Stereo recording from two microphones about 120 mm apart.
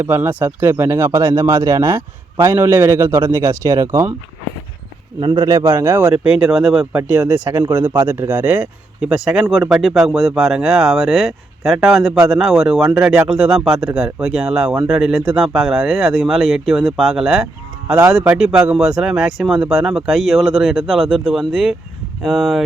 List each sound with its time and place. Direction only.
0.0 s speech: 20° right (ahead or behind)
5.2 s speech: 45° right (ahead or behind)
5.5 s speech: 30° right (ahead or behind)
5.7 s speech: 15° right (ahead or behind); by 22.6 s centre (ahead or behind)